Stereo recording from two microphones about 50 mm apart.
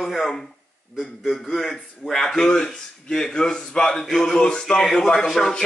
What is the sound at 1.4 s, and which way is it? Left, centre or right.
A man's voice, centre.